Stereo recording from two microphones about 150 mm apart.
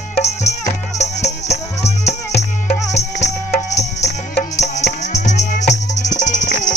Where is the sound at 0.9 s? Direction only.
50° left (ahead or behind).